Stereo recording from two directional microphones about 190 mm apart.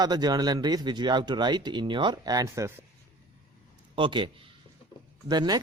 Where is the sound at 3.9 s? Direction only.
25° right (ahead or behind).